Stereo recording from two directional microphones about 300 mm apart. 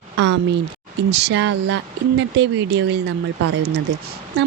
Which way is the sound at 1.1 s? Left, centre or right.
Right.